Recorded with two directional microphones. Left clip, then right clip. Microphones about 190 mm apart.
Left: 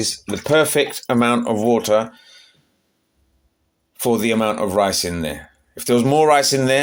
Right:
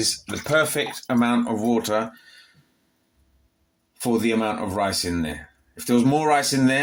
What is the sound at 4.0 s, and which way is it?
Speech, 40° left (ahead or behind).